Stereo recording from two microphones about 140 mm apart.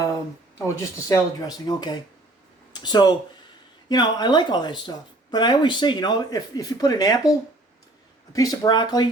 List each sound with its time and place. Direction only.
0.6 s speech: 25° left (ahead or behind)
8.3 s speech: 25° left (ahead or behind)